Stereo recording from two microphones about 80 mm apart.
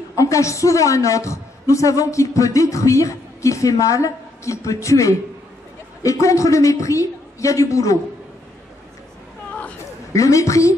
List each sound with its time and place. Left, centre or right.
0.1 s a woman's voice: left
10.1 s a woman's voice: left